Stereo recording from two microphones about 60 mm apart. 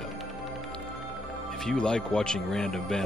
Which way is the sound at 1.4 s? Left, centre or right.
Centre.